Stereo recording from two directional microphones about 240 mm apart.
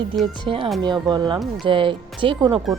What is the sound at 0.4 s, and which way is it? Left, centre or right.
A woman's voice, right.